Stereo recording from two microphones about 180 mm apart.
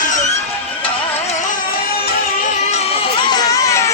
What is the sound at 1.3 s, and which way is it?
Music, 45° left (ahead or behind).